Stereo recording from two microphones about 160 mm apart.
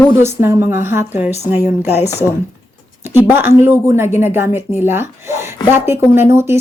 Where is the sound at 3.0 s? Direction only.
15° right (ahead or behind).